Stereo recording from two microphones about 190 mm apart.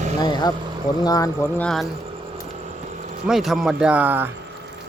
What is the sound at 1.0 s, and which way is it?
Speech, 20° left (ahead or behind).